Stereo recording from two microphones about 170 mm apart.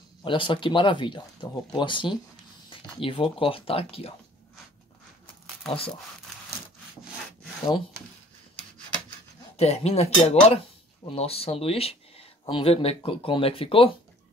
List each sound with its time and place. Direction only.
0.2 s speech: 30° left (ahead or behind)
9.6 s speech: 40° left (ahead or behind)